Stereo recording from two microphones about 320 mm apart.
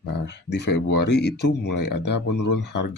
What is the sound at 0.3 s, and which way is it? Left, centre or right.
Speech, left.